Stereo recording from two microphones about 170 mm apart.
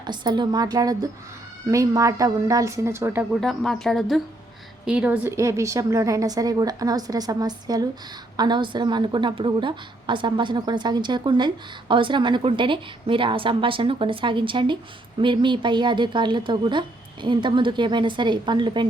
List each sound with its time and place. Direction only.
0.0 s a woman's voice: 25° right (ahead or behind)
3.4 s a woman's voice: 5° left (ahead or behind); by 18.9 s 25° right (ahead or behind)